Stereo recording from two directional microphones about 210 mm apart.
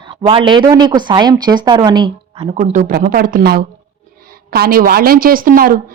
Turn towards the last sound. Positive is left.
turn(degrees=-40)  # may be behind; listen again after turning